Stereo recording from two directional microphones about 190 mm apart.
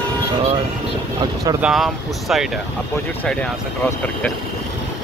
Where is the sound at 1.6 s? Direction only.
Centre (ahead or behind).